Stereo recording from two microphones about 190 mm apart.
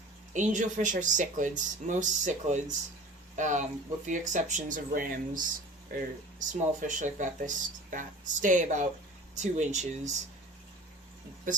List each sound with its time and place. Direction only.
0.3 s speech: 40° right (ahead or behind)